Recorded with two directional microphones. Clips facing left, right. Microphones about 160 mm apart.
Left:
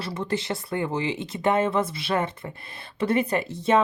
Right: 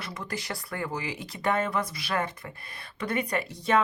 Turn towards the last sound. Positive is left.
turn(degrees=25)  # may be behind; listen again after turning